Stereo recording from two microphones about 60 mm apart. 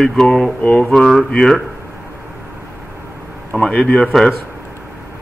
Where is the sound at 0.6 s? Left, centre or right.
Left.